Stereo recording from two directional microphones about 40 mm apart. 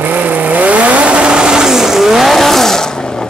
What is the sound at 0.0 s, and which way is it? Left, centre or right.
Vehicle, right.